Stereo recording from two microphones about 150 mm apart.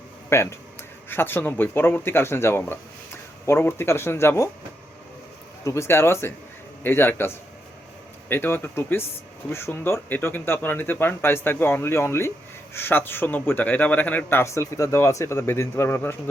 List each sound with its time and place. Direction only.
0.3 s speech: 15° left (ahead or behind)
5.6 s speech: 20° left (ahead or behind)